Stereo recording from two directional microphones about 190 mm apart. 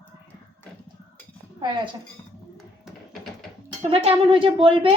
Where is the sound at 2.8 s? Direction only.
Centre (ahead or behind).